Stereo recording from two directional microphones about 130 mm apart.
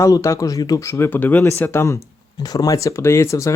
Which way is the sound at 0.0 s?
25° left (ahead or behind).